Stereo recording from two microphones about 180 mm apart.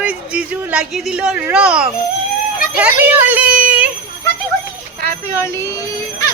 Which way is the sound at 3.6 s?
5° right (ahead or behind).